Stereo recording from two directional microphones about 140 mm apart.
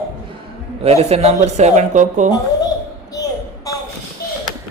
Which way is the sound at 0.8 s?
45° right (ahead or behind).